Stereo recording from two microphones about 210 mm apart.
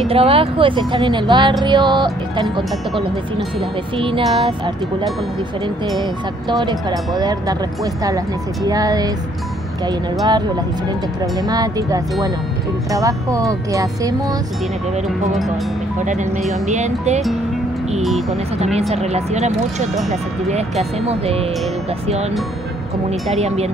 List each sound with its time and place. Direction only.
0.0 s speech: 25° right (ahead or behind)
6.6 s speech: 20° right (ahead or behind)
11.4 s speech: 15° right (ahead or behind)
16.1 s speech: 35° right (ahead or behind)
18.6 s speech: 30° right (ahead or behind)
21.0 s speech: 30° right (ahead or behind)
23.0 s speech: 30° right (ahead or behind)